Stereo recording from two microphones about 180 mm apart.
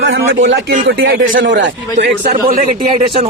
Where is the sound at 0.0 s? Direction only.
90° right.